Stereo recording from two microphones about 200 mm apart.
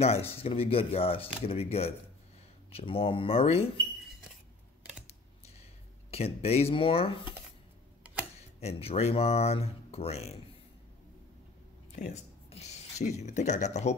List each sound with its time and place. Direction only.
0.0 s speech: 30° left (ahead or behind)
6.0 s speech: 30° left (ahead or behind)
8.0 s tick-tock: 5° right (ahead or behind)
8.4 s speech: 30° left (ahead or behind)
11.9 s a sound: 35° left (ahead or behind)
13.2 s speech: 35° left (ahead or behind)